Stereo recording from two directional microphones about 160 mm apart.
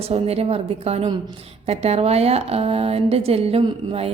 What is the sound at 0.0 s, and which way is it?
A woman's voice, 40° right (ahead or behind).